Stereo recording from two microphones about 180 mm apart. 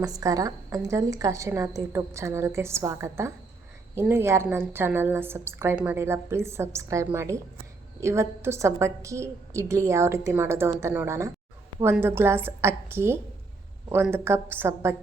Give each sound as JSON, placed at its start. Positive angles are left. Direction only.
{"t": 0.0, "sound": "a woman's voice", "side_deg": -20}